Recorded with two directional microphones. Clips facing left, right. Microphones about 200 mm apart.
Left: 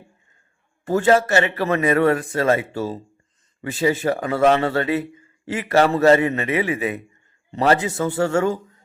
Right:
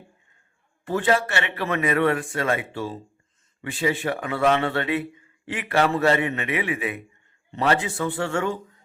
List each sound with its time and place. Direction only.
0.9 s a man's voice: 45° left (ahead or behind)